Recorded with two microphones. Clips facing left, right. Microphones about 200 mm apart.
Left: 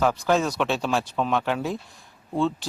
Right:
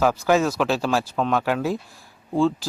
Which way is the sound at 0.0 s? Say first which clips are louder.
Right 3 dB; 5° right (ahead or behind).